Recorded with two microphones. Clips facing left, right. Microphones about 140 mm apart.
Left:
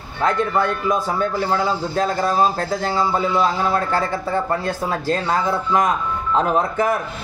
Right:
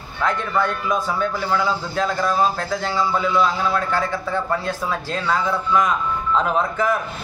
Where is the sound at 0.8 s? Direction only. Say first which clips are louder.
Left 2 dB; 35° left (ahead or behind).